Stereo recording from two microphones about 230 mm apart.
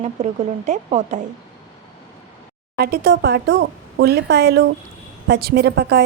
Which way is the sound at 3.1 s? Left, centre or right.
Right.